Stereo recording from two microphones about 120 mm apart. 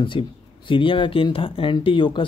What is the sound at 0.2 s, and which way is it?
Speech, 45° left (ahead or behind).